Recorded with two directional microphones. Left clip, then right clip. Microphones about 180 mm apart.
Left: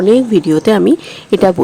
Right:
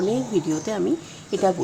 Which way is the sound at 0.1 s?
45° left (ahead or behind).